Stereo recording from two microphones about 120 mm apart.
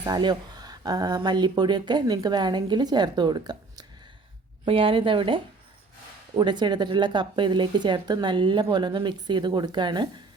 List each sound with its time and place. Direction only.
0.0 s speech: 35° right (ahead or behind)
4.6 s speech: 50° right (ahead or behind)